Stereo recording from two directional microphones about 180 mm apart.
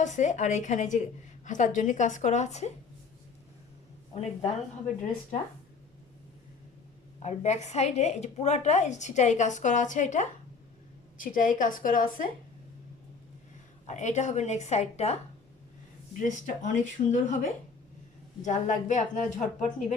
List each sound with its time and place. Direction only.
0.0 s a woman's voice: 40° left (ahead or behind)
4.1 s a woman's voice: 35° left (ahead or behind)
7.2 s a woman's voice: 40° left (ahead or behind)
13.8 s a woman's voice: 40° left (ahead or behind)